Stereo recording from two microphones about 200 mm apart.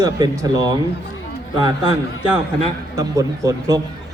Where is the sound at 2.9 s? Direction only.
15° right (ahead or behind).